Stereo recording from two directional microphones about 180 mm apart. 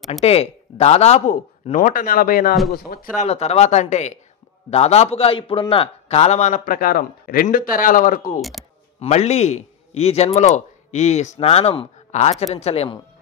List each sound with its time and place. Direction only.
0.2 s a man's voice: 35° left (ahead or behind); by 3.3 s 55° left (ahead or behind)
3.3 s a man's voice: 35° left (ahead or behind)
8.4 s speech: centre (ahead or behind)
9.0 s speech: 35° left (ahead or behind)